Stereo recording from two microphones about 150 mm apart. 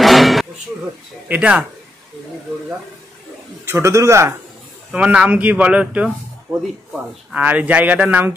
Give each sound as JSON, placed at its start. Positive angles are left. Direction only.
{"t": 0.0, "sound": "music", "side_deg": 0}
{"t": 1.3, "sound": "a man's voice", "side_deg": -10}
{"t": 3.6, "sound": "a man's voice", "side_deg": -15}
{"t": 4.9, "sound": "a man's voice", "side_deg": -5}